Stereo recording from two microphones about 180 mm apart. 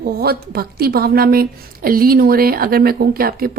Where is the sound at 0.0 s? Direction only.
60° right (ahead or behind).